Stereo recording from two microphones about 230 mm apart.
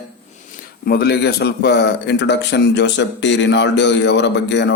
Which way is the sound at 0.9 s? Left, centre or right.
Left.